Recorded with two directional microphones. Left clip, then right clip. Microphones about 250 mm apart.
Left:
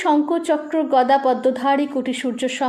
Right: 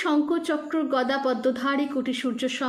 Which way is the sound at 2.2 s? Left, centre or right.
Left.